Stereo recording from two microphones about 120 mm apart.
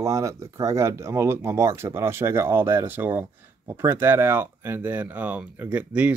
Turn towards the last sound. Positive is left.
turn(degrees=-10)  # may be behind; listen again after turning